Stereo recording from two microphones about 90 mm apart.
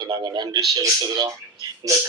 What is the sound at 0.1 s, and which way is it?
Speech, 45° right (ahead or behind).